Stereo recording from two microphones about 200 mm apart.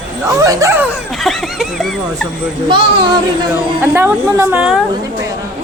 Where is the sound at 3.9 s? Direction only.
10° right (ahead or behind).